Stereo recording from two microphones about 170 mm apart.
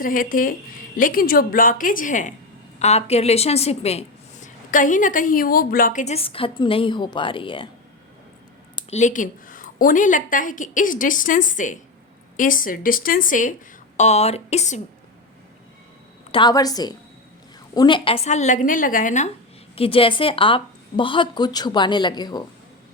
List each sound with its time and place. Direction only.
0.0 s a woman's voice: 55° left (ahead or behind); by 7.7 s 30° left (ahead or behind)
8.9 s a woman's voice: 45° left (ahead or behind)
16.3 s a woman's voice: 25° left (ahead or behind); by 19.3 s 45° left (ahead or behind)
19.7 s a woman's voice: 35° left (ahead or behind)